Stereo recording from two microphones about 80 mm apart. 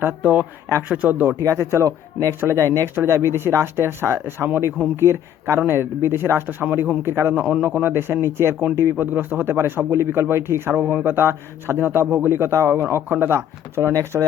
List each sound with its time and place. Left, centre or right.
0.1 s speech: right
1.4 s speech: right
2.9 s speech: right
7.3 s speech: centre; by 14.3 s right